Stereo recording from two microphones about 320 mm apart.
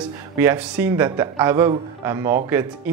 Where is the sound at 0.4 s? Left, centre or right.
Centre.